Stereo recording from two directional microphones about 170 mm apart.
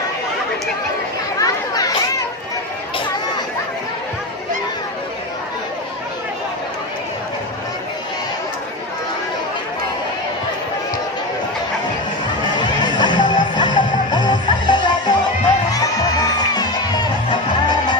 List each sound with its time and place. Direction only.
1.4 s children playing: 20° left (ahead or behind)
12.4 s music: 25° left (ahead or behind)
16.6 s music: 25° left (ahead or behind)